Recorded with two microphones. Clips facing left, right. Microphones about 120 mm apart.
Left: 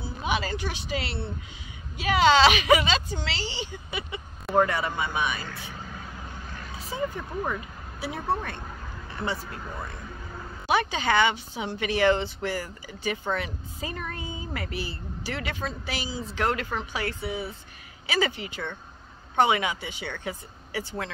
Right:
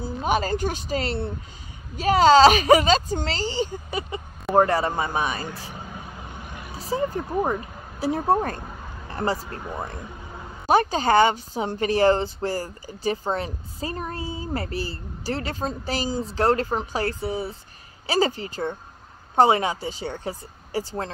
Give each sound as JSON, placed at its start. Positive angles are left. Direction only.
{"t": 0.0, "sound": "speech", "side_deg": -45}
{"t": 6.4, "sound": "vehicle", "side_deg": -15}
{"t": 6.8, "sound": "speech", "side_deg": -35}